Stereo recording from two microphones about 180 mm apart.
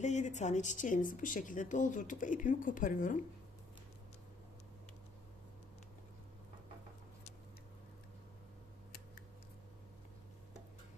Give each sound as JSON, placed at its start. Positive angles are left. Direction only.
{"t": 0.0, "sound": "speech", "side_deg": 40}